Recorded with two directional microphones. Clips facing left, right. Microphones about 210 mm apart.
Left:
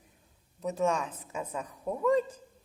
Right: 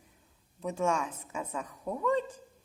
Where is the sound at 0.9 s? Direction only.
35° left (ahead or behind).